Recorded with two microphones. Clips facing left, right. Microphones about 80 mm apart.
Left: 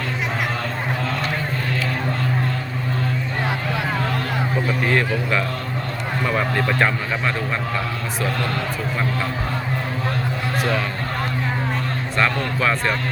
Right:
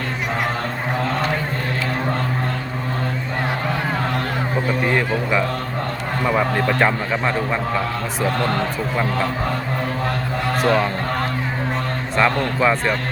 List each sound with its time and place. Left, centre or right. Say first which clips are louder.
4.9 s a man's voice: right 1 dB; centre
8.2 s a man's voice: right 4 dB; right
10.6 s speech: right 5 dB; right
12.1 s a man's voice: right 3 dB; right